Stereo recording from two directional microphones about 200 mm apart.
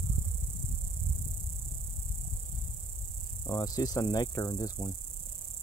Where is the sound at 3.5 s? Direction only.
15° left (ahead or behind).